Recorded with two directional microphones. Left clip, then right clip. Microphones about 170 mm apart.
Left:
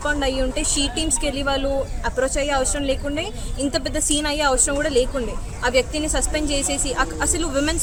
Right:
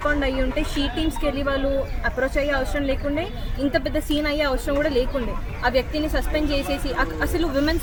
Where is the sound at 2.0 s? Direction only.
40° left (ahead or behind).